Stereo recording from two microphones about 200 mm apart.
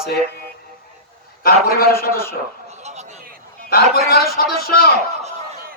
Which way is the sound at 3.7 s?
50° left (ahead or behind).